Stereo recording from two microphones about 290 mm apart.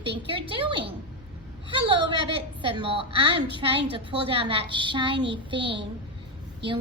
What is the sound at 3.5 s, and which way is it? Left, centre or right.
A woman's voice, centre.